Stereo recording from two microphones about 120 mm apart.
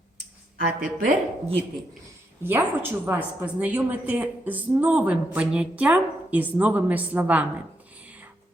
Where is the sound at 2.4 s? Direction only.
15° right (ahead or behind).